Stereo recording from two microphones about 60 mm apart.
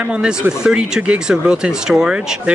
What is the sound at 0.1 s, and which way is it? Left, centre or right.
Speech, centre.